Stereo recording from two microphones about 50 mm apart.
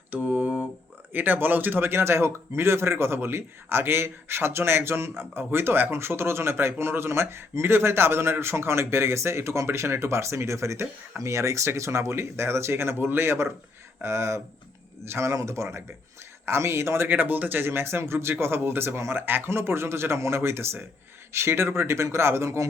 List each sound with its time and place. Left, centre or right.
0.1 s a sound: right
1.1 s speech: right
11.2 s speech: right
14.0 s speech: right
16.5 s speech: right
17.1 s speech: right